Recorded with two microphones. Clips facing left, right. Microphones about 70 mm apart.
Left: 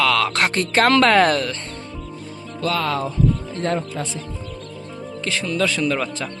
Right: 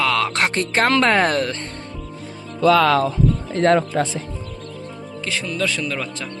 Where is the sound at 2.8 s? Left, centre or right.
Right.